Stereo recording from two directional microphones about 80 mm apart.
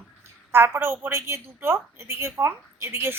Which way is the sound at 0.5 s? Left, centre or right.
Right.